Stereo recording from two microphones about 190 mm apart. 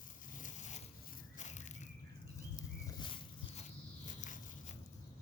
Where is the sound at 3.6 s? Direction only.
40° left (ahead or behind).